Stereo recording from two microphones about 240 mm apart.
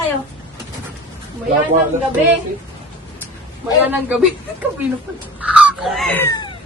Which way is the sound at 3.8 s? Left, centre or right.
Centre.